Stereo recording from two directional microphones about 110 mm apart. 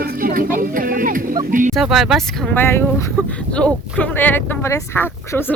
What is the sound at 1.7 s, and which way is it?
Speech, centre (ahead or behind).